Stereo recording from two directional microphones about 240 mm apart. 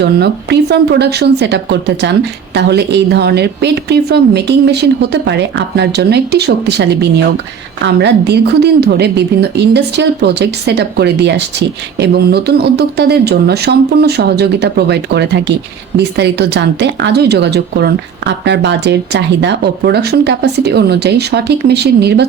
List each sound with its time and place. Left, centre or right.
0.0 s speech: right